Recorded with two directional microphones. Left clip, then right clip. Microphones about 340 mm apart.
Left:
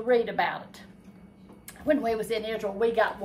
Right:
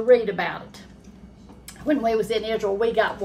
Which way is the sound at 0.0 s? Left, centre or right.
Centre.